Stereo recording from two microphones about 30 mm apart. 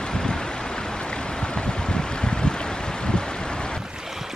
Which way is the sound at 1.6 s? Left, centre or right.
Left.